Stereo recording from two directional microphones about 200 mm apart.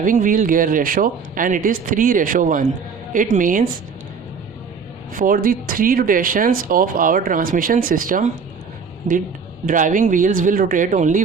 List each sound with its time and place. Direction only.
0.0 s speech: 40° right (ahead or behind)
5.1 s speech: 45° right (ahead or behind)
9.6 s speech: 40° right (ahead or behind)